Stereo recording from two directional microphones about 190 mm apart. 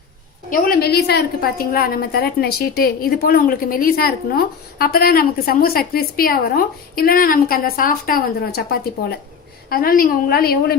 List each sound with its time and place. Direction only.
0.5 s a woman's voice: 55° left (ahead or behind)